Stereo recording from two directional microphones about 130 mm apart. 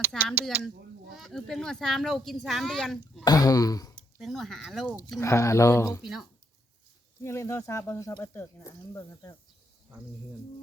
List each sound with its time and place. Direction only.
0.1 s speech: 5° left (ahead or behind)
0.5 s speech: 15° right (ahead or behind)
1.1 s speech: centre (ahead or behind)
3.2 s speech: 30° left (ahead or behind)
4.2 s speech: centre (ahead or behind)
5.2 s speech: 20° left (ahead or behind)
7.2 s speech: 20° left (ahead or behind)